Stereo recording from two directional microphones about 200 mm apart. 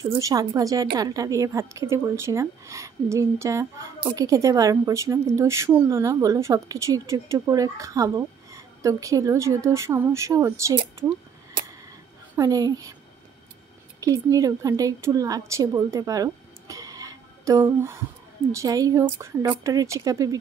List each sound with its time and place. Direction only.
0.0 s a woman's voice: 15° right (ahead or behind)
12.4 s a woman's voice: 20° right (ahead or behind)
13.9 s a woman's voice: 20° right (ahead or behind)